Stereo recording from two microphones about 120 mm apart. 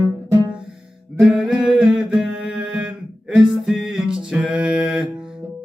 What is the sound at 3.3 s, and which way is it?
Music, 5° right (ahead or behind).